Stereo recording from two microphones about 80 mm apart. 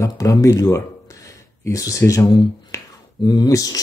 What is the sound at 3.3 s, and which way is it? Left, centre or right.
Speech, left.